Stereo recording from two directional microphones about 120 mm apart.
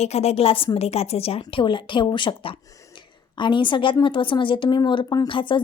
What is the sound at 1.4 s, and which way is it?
A woman's voice, 45° left (ahead or behind).